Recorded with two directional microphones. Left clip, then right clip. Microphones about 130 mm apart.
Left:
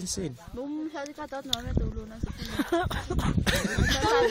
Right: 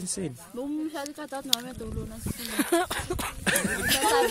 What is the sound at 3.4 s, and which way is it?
Speech, 10° left (ahead or behind).